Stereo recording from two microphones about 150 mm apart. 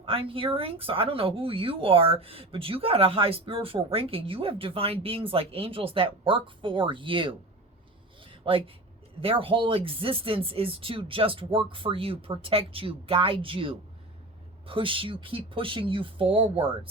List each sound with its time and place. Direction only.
0.0 s speech: 35° right (ahead or behind)
8.3 s a sound: 35° right (ahead or behind)
9.2 s speech: 35° right (ahead or behind)